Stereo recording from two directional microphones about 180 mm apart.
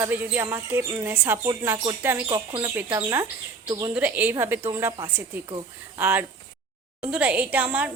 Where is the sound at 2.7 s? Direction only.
15° right (ahead or behind).